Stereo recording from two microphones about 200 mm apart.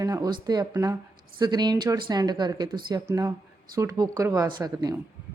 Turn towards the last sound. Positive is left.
turn(degrees=-20)  # may be behind; listen again after turning